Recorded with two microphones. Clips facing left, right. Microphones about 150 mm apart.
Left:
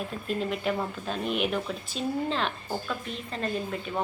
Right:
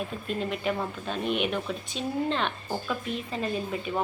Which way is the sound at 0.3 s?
Centre (ahead or behind).